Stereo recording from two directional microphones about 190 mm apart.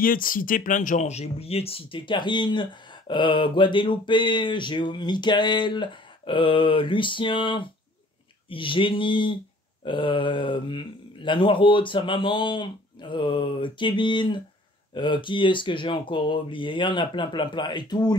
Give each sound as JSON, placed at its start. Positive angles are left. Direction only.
{"t": 0.0, "sound": "speech", "side_deg": 50}